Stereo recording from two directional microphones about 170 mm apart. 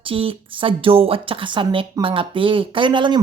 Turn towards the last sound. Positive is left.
turn(degrees=-30)  # may be behind; listen again after turning